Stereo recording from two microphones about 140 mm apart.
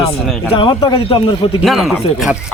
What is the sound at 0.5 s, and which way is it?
A man's voice, 35° left (ahead or behind).